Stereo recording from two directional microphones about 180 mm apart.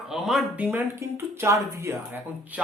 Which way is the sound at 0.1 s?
Centre (ahead or behind).